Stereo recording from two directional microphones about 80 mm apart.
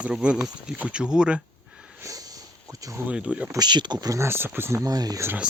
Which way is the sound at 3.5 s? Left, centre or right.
Right.